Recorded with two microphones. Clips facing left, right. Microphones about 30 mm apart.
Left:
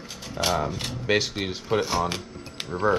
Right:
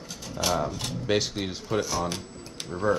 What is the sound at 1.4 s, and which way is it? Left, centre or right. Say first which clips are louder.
Speech: left 3 dB; left.